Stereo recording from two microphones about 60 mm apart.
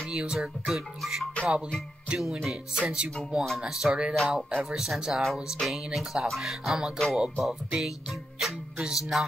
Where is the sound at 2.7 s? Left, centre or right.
Centre.